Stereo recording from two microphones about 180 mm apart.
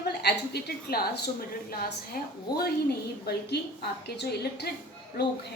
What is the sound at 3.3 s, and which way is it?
A woman's voice, 65° left (ahead or behind).